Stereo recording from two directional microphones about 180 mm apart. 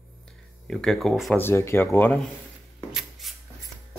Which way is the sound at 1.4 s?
15° left (ahead or behind).